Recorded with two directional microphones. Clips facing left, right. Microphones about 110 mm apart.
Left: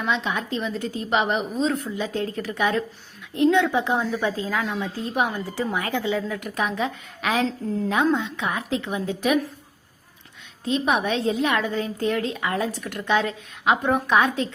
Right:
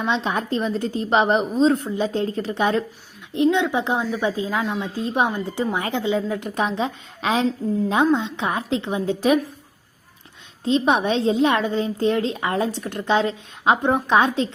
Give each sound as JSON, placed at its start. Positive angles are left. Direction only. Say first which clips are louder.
{"t": 0.0, "sound": "a woman's voice", "louder": "right 3 dB", "side_deg": -30}
{"t": 3.3, "sound": "a woman's voice", "louder": "even", "side_deg": -20}
{"t": 10.7, "sound": "a woman's voice", "louder": "right 4 dB", "side_deg": -30}